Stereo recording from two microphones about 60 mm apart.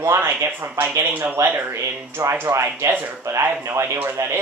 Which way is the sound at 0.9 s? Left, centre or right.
Right.